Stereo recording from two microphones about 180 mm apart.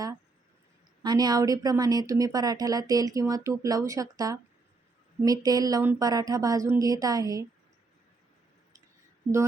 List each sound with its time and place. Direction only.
1.0 s speech: 20° right (ahead or behind)